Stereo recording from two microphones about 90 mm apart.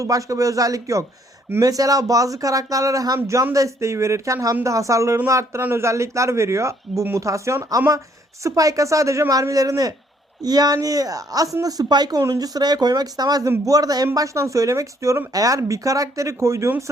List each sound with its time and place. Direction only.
0.0 s a man's voice: 40° right (ahead or behind)
12.2 s a man's voice: 40° right (ahead or behind)